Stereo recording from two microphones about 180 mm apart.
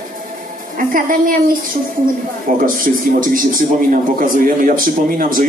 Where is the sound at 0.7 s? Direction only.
50° right (ahead or behind).